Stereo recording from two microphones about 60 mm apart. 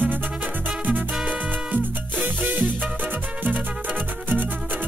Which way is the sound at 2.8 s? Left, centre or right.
Right.